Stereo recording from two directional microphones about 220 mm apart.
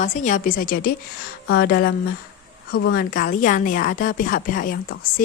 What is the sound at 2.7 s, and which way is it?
Speech, 70° left (ahead or behind).